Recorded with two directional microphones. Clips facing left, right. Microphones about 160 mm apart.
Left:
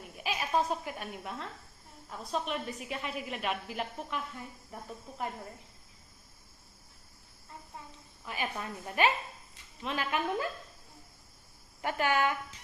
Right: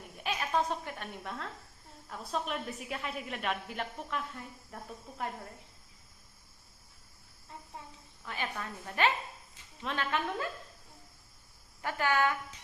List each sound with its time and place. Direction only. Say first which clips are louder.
0.2 s a woman's voice: left 1 dB; 5° left (ahead or behind)
8.2 s speech: left 2 dB; 10° left (ahead or behind)
11.8 s speech: left 1 dB; 20° left (ahead or behind)